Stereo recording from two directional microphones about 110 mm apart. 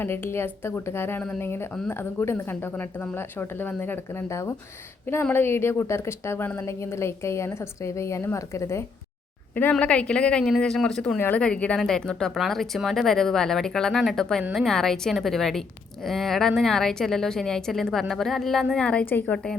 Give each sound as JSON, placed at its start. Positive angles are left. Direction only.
{"t": 0.0, "sound": "a woman's voice", "side_deg": 20}
{"t": 9.7, "sound": "a woman's voice", "side_deg": 10}